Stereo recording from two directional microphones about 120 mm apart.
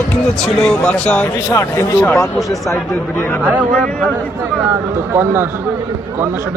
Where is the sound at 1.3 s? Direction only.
25° left (ahead or behind).